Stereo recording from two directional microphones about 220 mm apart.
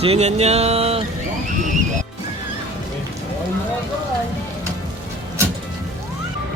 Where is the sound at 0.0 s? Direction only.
30° right (ahead or behind).